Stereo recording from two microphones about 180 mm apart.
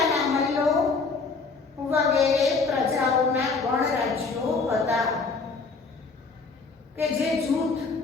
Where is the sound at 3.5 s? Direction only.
Centre (ahead or behind).